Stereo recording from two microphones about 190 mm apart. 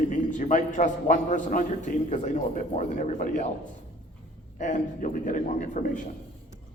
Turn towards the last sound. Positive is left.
turn(degrees=40)  # may be behind; listen again after turning